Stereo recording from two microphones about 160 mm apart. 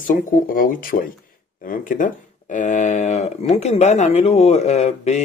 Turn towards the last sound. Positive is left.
turn(degrees=45)  # may be behind; listen again after turning